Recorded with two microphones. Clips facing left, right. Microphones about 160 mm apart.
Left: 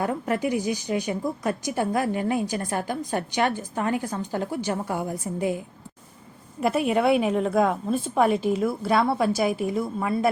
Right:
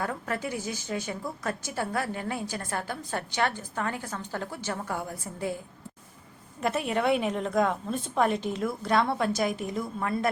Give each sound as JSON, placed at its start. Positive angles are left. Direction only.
{"t": 0.0, "sound": "a woman's voice", "side_deg": 20}